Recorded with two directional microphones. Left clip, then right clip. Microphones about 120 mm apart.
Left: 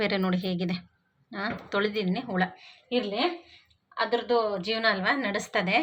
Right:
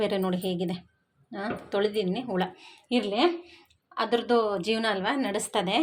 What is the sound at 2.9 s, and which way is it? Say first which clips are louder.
Speech: even; 85° right.